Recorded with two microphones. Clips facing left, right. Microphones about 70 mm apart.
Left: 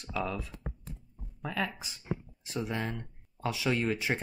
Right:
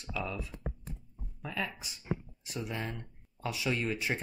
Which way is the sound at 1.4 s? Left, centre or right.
Left.